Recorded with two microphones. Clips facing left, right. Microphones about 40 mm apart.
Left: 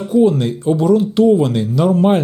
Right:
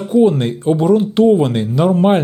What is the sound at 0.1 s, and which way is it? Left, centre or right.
Speech, right.